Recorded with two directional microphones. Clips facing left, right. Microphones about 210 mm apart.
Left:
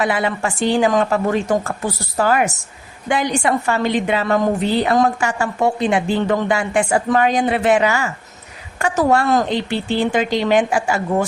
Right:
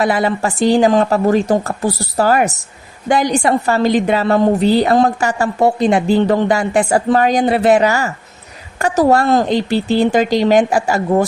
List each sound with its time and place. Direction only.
0.0 s a woman's voice: 40° right (ahead or behind)